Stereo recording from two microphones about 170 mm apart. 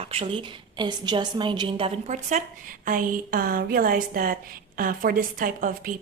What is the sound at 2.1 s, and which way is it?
Speech, 45° right (ahead or behind).